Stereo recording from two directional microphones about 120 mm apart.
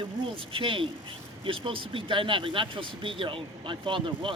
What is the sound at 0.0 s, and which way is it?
Speech, 45° right (ahead or behind).